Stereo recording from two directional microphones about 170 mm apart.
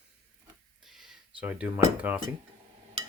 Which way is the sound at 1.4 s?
10° right (ahead or behind).